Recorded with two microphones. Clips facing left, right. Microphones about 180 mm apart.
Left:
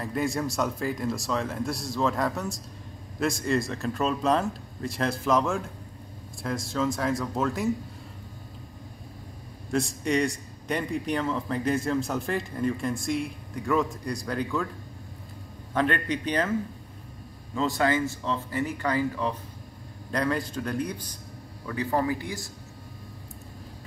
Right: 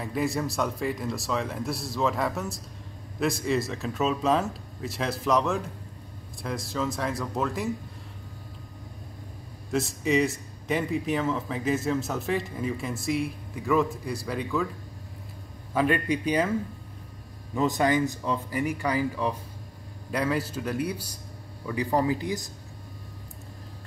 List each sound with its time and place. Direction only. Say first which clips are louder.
0.0 s a man's voice: even; centre (ahead or behind)
9.7 s a man's voice: right 1 dB; centre (ahead or behind)
15.7 s speech: right 2 dB; 10° right (ahead or behind)
17.6 s a man's voice: right 1 dB; 20° right (ahead or behind)